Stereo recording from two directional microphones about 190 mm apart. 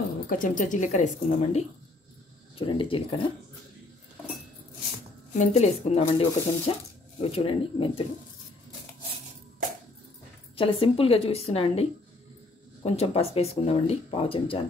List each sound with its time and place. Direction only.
0.3 s speech: 45° left (ahead or behind)
2.5 s a woman's voice: 25° left (ahead or behind)
5.3 s speech: 35° left (ahead or behind)
10.5 s a woman's voice: 30° left (ahead or behind)